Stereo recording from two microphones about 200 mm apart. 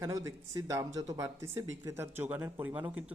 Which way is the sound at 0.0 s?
15° right (ahead or behind).